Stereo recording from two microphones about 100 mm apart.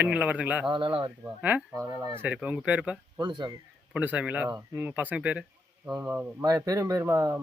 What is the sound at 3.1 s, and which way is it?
Speech, 45° right (ahead or behind).